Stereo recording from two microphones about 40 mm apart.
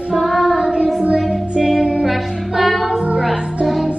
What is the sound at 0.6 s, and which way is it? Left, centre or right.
Child singing, right.